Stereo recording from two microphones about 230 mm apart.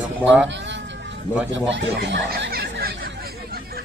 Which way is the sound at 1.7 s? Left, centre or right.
Right.